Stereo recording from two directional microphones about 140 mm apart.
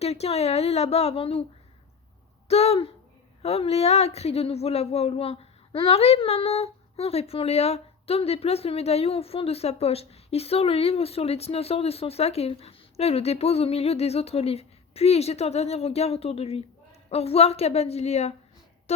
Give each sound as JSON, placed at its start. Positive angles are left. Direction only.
{"t": 0.0, "sound": "speech", "side_deg": 50}
{"t": 2.5, "sound": "speech", "side_deg": 45}